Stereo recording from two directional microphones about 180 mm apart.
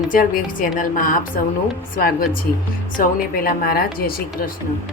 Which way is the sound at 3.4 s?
55° left (ahead or behind).